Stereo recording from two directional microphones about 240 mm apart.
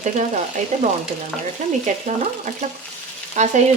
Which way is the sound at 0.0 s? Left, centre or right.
Right.